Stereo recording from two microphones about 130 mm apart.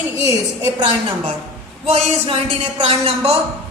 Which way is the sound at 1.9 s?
50° right (ahead or behind).